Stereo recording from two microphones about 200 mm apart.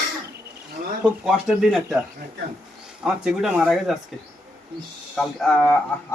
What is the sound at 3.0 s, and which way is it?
Speech, centre (ahead or behind).